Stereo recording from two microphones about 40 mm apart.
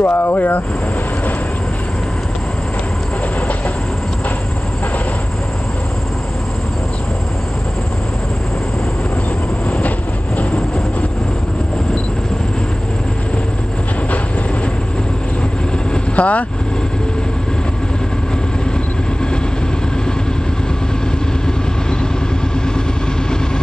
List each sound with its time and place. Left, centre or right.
0.0 s speech: left
9.7 s train: left
16.2 s speech: left